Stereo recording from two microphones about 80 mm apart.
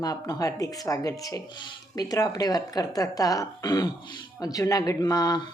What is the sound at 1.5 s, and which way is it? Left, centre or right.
Speech, left.